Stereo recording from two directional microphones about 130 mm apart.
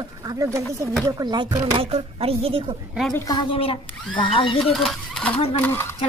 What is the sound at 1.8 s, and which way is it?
Speech, 45° right (ahead or behind).